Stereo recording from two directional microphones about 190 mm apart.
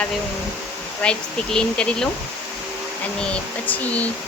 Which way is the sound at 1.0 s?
5° left (ahead or behind).